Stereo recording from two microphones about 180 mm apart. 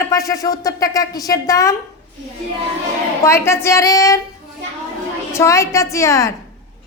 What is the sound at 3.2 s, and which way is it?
A woman's voice, 15° left (ahead or behind).